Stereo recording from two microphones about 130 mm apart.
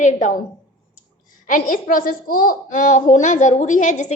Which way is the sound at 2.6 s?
80° left.